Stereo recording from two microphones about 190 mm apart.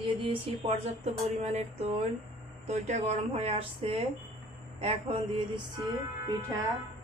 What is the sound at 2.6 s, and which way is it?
Speech, 35° right (ahead or behind).